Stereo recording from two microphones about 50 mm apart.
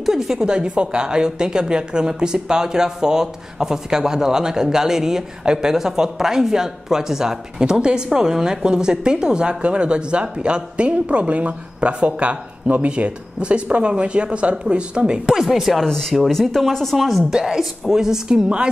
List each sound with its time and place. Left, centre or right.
0.0 s speech: centre
0.5 s speech: right
15.3 s speech: centre
17.2 s speech: centre